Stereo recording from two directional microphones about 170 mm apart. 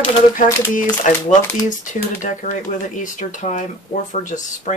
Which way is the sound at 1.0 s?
50° left (ahead or behind).